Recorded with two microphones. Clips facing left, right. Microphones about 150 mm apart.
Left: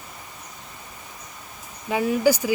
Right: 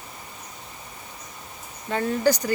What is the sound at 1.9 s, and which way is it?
Speech, 10° left (ahead or behind).